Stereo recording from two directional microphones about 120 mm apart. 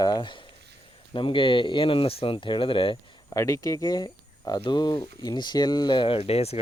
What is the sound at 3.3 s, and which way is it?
Speech, 25° left (ahead or behind).